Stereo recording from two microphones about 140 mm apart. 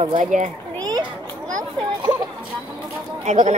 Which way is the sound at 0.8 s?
30° right (ahead or behind).